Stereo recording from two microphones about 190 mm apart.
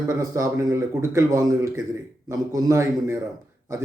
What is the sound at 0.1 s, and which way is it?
Speech, 15° right (ahead or behind).